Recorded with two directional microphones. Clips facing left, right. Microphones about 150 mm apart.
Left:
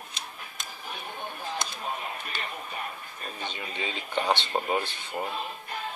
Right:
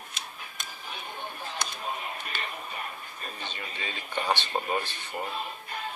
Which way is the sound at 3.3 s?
15° left (ahead or behind).